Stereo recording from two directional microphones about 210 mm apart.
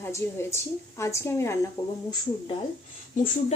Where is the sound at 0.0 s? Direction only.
10° left (ahead or behind).